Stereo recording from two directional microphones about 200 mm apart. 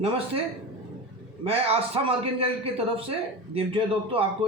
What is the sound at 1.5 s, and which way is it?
A man's voice, 30° right (ahead or behind).